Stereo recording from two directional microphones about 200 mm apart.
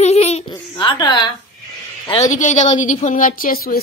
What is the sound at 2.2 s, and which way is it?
A woman's voice, 40° left (ahead or behind).